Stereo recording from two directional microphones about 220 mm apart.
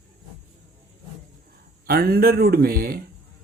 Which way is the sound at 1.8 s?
45° right (ahead or behind).